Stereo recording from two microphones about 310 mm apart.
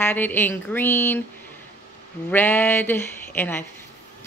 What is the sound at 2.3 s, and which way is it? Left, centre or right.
A woman's voice, centre.